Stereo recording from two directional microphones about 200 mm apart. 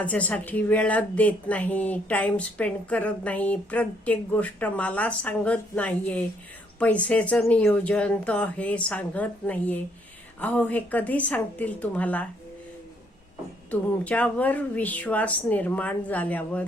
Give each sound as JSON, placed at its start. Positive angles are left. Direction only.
{"t": 0.0, "sound": "speech", "side_deg": 5}
{"t": 13.7, "sound": "speech", "side_deg": 5}